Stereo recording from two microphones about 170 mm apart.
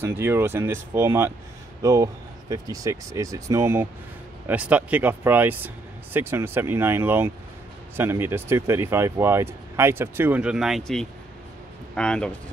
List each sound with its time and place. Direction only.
0.0 s a man's voice: 15° right (ahead or behind); by 12.4 s 5° left (ahead or behind)